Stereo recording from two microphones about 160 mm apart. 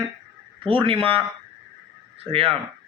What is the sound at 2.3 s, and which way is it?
Speech, 35° right (ahead or behind).